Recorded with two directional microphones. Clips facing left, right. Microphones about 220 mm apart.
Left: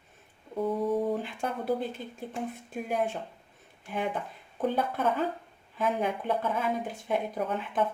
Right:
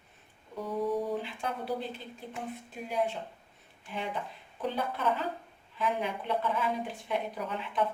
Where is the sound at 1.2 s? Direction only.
50° left (ahead or behind).